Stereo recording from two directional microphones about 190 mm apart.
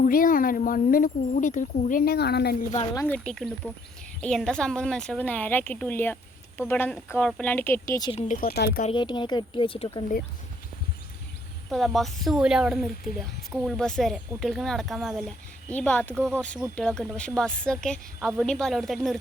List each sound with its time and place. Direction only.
0.0 s speech: 45° left (ahead or behind)
2.9 s a woman's voice: 15° left (ahead or behind)
3.2 s a woman's voice: centre (ahead or behind); by 8.1 s 15° left (ahead or behind)
8.1 s speech: 45° left (ahead or behind)
8.8 s speech: 25° left (ahead or behind)
11.7 s a woman's voice: centre (ahead or behind)